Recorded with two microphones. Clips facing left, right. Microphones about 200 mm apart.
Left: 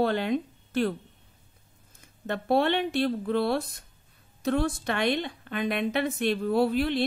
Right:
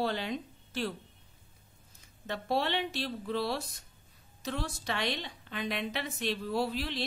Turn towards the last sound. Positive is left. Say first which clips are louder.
# left 9 dB
turn(degrees=55)  # may be behind; listen again after turning